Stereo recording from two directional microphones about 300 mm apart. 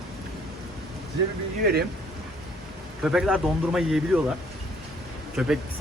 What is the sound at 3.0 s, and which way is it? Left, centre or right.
Speech, centre.